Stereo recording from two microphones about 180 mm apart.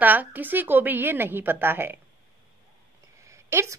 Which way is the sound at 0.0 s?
10° right (ahead or behind).